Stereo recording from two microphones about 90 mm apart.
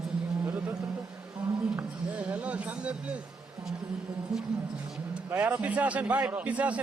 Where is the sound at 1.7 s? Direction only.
15° right (ahead or behind).